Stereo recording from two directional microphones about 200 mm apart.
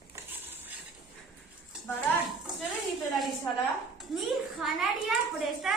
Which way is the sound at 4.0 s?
Centre (ahead or behind).